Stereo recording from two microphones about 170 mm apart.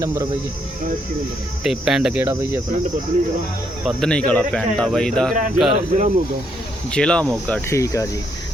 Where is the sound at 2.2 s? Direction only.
15° right (ahead or behind).